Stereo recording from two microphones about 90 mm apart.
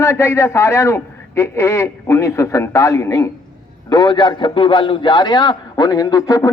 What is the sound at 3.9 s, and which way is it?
A man's voice, 50° left (ahead or behind).